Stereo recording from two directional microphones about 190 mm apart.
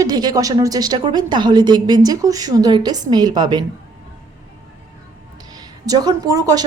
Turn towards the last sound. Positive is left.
turn(degrees=-20)  # may be behind; listen again after turning